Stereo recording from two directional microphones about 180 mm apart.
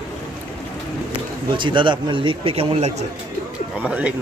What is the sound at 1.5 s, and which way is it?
A man's voice, 25° right (ahead or behind).